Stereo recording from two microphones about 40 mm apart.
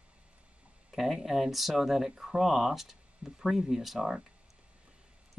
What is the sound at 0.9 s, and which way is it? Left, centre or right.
Speech, centre.